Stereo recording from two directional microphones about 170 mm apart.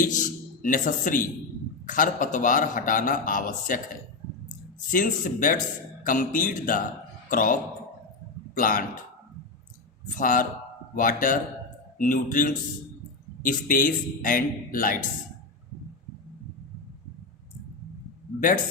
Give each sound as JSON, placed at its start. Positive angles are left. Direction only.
{"t": 0.0, "sound": "a man's voice", "side_deg": 50}
{"t": 4.9, "sound": "a man's voice", "side_deg": 50}
{"t": 10.2, "sound": "a man's voice", "side_deg": 50}
{"t": 18.3, "sound": "a man's voice", "side_deg": 50}